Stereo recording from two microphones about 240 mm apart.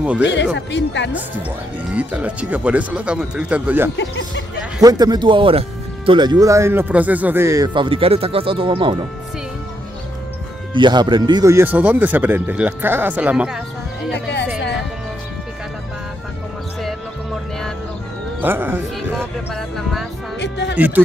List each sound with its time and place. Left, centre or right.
0.2 s speech: left
2.0 s speech: centre
3.9 s speech: left
4.8 s speech: centre
10.7 s speech: centre
14.1 s speech: left
18.4 s speech: centre
20.3 s speech: left
20.7 s speech: centre